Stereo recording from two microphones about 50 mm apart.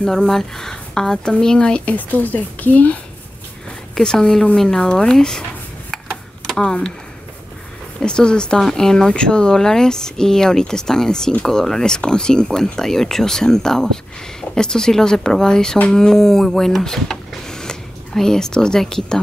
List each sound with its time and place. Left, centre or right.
0.0 s speech: centre
2.0 s speech: left
3.9 s speech: centre
6.4 s speech: centre
8.0 s speech: centre